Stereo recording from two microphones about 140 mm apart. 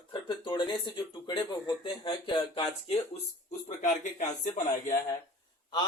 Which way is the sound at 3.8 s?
60° left (ahead or behind).